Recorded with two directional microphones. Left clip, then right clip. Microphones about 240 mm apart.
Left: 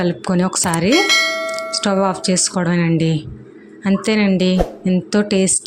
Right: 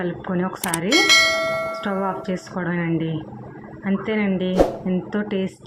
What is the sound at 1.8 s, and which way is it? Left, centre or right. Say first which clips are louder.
A woman's voice: left 7 dB; left.